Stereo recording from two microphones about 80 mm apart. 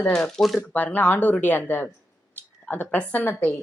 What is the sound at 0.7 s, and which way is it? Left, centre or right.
Speech, left.